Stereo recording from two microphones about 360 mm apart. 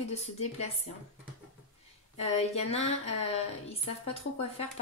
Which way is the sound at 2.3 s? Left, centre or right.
Centre.